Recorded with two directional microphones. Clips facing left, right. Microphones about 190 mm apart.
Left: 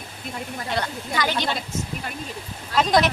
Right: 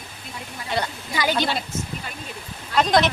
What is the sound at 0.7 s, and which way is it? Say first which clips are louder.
Speech: right 1 dB; 5° right (ahead or behind).